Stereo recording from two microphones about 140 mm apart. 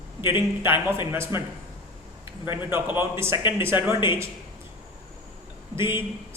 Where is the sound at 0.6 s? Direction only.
15° right (ahead or behind).